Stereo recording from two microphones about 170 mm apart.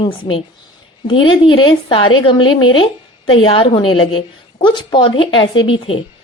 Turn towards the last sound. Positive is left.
turn(degrees=30)  # may be behind; listen again after turning